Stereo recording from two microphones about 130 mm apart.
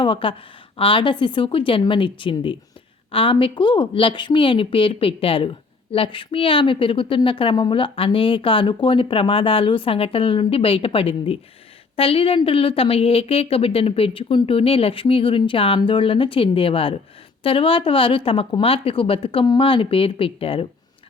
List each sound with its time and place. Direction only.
0.0 s a woman's voice: 40° left (ahead or behind)